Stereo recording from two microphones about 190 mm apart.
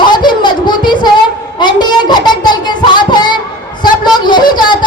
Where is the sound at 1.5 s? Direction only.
25° left (ahead or behind).